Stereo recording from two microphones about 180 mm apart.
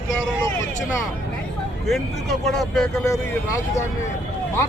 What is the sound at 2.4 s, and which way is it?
Speech, centre (ahead or behind).